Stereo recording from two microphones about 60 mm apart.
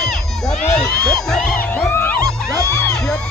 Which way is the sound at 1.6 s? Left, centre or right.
Left.